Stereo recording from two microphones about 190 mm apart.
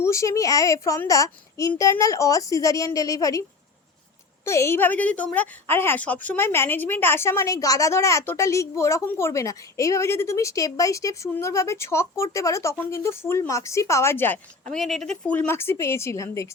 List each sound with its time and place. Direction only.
0.0 s a woman's voice: 15° left (ahead or behind)
4.4 s a woman's voice: 15° left (ahead or behind)
14.7 s a woman's voice: centre (ahead or behind)